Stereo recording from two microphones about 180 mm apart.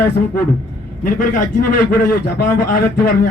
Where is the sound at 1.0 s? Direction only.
50° left (ahead or behind).